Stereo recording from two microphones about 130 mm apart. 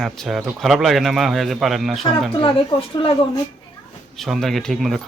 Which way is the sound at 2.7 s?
40° left (ahead or behind).